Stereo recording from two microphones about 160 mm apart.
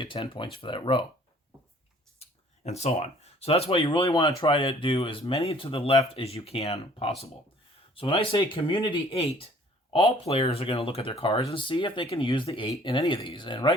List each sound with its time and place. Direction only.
0.0 s speech: 30° left (ahead or behind)
2.6 s speech: 45° left (ahead or behind)